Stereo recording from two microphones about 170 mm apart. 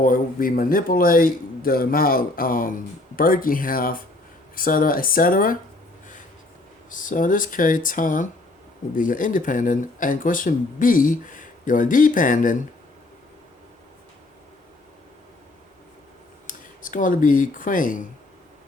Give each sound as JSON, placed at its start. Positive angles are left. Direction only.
{"t": 0.0, "sound": "speech", "side_deg": 55}
{"t": 6.9, "sound": "speech", "side_deg": 50}
{"t": 16.5, "sound": "speech", "side_deg": 50}